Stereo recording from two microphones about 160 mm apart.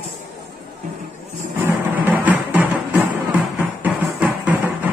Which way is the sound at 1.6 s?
10° right (ahead or behind).